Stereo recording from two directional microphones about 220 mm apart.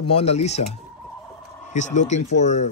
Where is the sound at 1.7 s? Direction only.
35° left (ahead or behind).